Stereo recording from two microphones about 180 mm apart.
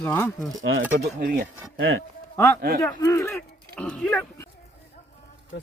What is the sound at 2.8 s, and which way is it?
Speech, 15° left (ahead or behind).